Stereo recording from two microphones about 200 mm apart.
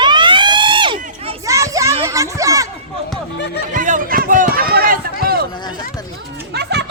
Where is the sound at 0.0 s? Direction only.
25° right (ahead or behind).